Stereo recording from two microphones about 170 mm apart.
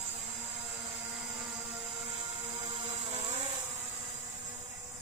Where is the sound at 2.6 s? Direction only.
30° right (ahead or behind).